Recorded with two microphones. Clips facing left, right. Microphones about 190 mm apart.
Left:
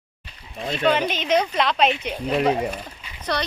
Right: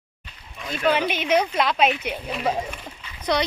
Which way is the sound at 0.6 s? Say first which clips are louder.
Left 4 dB; 25° left (ahead or behind).